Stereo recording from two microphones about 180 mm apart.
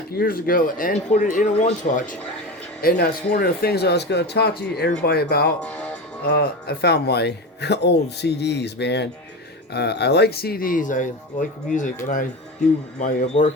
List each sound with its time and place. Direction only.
0.1 s speech: 55° left (ahead or behind)
2.8 s speech: 55° left (ahead or behind)
5.6 s speech: 5° left (ahead or behind)
6.2 s speech: 60° left (ahead or behind); by 11.9 s 45° left (ahead or behind)
13.0 s speech: 40° left (ahead or behind)